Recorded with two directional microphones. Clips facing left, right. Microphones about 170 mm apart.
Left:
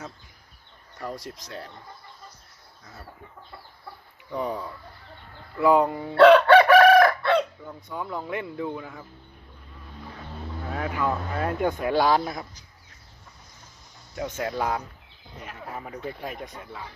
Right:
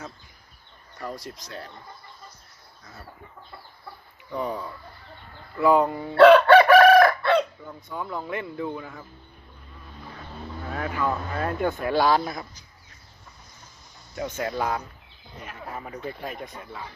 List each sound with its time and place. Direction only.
0.9 s speech: 20° left (ahead or behind)
4.4 s speech: 15° left (ahead or behind)
6.1 s chicken: 5° right (ahead or behind)
7.7 s speech: 15° left (ahead or behind)
10.7 s speech: 15° left (ahead or behind)
14.2 s speech: 5° left (ahead or behind)